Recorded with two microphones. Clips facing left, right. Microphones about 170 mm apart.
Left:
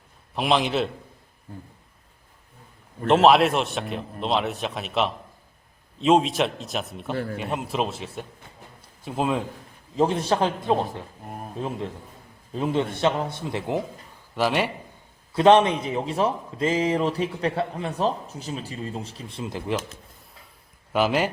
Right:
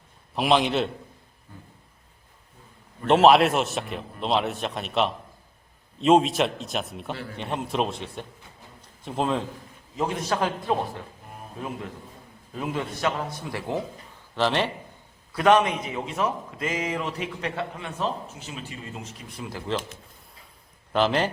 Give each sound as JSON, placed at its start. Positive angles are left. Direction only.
{"t": 0.3, "sound": "a man's voice", "side_deg": 0}
{"t": 3.1, "sound": "a man's voice", "side_deg": 0}
{"t": 8.8, "sound": "a sound", "side_deg": 5}
{"t": 9.9, "sound": "a man's voice", "side_deg": 30}
{"t": 12.5, "sound": "a man's voice", "side_deg": 25}
{"t": 15.3, "sound": "a man's voice", "side_deg": 25}
{"t": 20.9, "sound": "a man's voice", "side_deg": 10}